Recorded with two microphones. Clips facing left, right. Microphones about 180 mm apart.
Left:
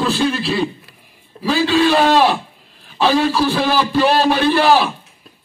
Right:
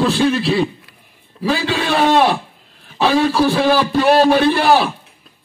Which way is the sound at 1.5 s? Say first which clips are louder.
Left 4 dB; 60° right (ahead or behind).